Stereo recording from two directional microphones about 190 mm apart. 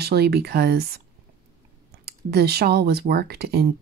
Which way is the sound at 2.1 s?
55° right (ahead or behind).